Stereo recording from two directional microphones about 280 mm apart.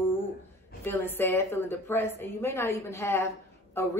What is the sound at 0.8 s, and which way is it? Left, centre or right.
Speech, centre.